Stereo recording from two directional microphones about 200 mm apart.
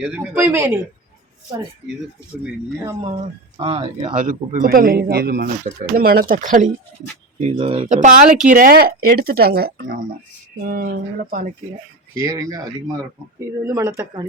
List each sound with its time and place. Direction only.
0.0 s speech: 10° right (ahead or behind)
3.6 s speech: 25° right (ahead or behind)
4.1 s speech: 40° right (ahead or behind)
12.3 s speech: 15° right (ahead or behind)
13.7 s speech: 15° right (ahead or behind)